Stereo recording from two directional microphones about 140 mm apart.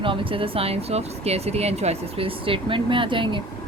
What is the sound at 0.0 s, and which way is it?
Speech, 40° right (ahead or behind).